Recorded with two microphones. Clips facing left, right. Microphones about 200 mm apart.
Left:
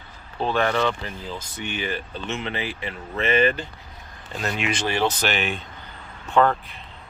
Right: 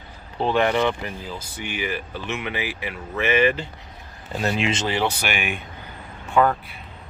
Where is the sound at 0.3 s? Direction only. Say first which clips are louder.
Right 2 dB; 15° right (ahead or behind).